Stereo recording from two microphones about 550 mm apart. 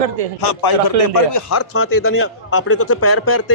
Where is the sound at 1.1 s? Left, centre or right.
Left.